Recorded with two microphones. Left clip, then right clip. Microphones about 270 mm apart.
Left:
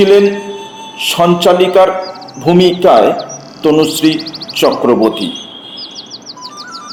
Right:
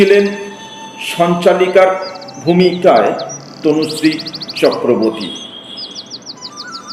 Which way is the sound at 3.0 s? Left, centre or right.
Centre.